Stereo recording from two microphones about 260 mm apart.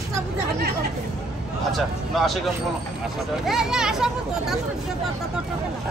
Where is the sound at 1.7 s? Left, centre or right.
Centre.